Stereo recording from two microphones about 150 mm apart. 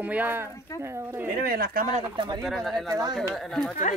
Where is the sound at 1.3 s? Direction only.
85° right.